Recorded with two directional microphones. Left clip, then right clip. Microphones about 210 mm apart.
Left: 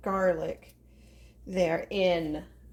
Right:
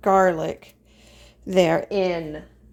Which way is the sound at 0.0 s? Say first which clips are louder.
Right 9 dB; 50° right (ahead or behind).